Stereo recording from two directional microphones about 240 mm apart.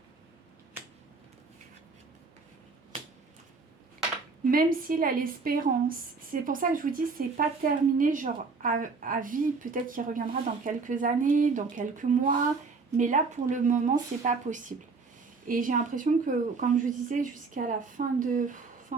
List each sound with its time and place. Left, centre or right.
4.5 s a woman's voice: right